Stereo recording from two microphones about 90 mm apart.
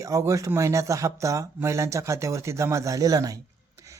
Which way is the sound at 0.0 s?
35° right (ahead or behind).